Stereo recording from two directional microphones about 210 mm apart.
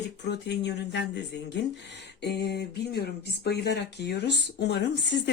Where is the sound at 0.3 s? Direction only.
55° left (ahead or behind).